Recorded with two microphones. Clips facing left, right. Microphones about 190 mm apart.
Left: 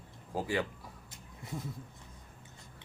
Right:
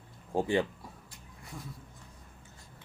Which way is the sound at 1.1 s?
20° left (ahead or behind).